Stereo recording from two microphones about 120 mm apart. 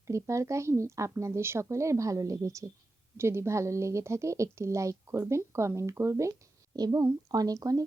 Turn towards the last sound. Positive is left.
turn(degrees=-30)  # may be behind; listen again after turning